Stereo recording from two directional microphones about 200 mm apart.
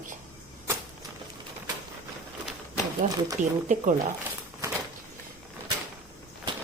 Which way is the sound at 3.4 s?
40° right (ahead or behind).